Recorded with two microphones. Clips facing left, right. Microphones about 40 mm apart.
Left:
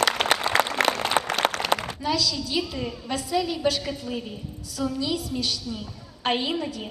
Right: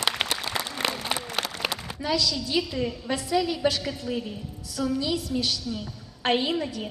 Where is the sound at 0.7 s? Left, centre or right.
Left.